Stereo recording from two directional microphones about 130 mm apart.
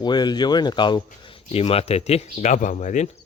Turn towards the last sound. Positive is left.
turn(degrees=65)  # may be behind; listen again after turning